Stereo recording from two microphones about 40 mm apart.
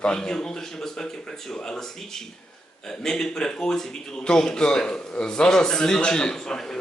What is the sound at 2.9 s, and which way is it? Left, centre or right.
A man's voice, centre.